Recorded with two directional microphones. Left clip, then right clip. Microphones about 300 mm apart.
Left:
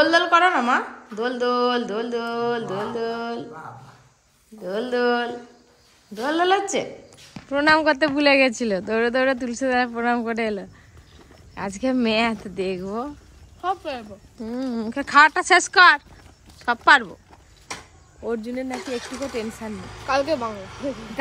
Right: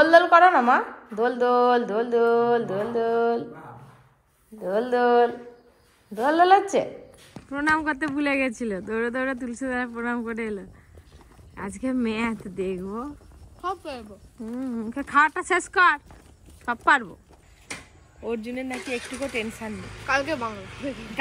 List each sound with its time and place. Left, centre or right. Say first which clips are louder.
0.0 s a woman's voice: right 2 dB; centre
4.6 s a woman's voice: right 1 dB; centre
17.7 s a sound: left 2 dB; left
18.2 s speech: left 3 dB; centre
18.7 s speech: left 2 dB; left
20.1 s a woman's voice: left 3 dB; centre
20.5 s speech: left 4 dB; left